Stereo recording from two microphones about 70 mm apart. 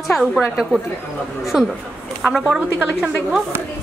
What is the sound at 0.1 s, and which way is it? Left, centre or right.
A woman's voice, centre.